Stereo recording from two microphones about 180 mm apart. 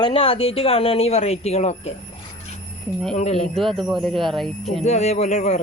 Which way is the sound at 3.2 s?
35° left (ahead or behind).